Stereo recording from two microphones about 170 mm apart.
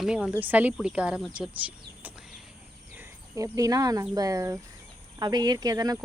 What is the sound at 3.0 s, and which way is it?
Speech, 20° right (ahead or behind).